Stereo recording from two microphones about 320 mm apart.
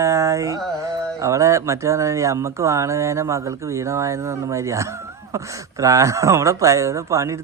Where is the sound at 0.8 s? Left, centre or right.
Centre.